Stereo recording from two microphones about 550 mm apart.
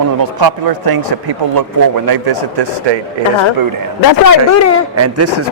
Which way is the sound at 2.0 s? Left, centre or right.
Right.